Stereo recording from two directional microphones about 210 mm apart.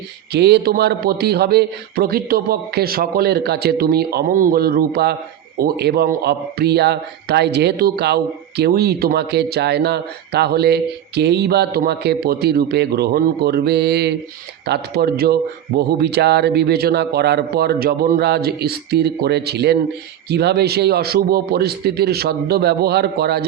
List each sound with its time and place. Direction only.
0.3 s a man's voice: 50° right (ahead or behind)